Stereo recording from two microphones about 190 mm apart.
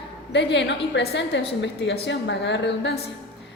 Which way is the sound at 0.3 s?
65° left (ahead or behind).